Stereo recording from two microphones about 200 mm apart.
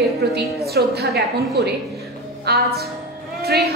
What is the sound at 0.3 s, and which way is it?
A woman's voice, 55° right (ahead or behind).